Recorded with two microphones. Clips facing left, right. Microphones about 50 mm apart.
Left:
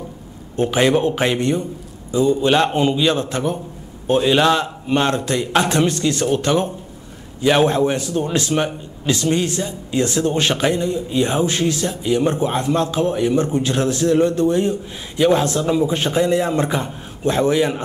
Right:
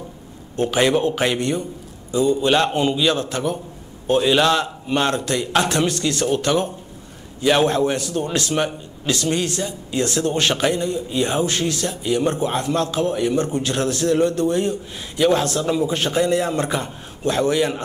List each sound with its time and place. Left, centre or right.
0.6 s a man's voice: left
4.2 s a man's voice: centre